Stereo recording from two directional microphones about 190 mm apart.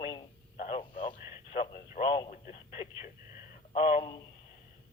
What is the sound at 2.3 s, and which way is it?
Radio, 35° left (ahead or behind).